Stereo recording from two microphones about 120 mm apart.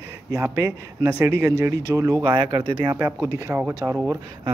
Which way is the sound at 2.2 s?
40° right (ahead or behind).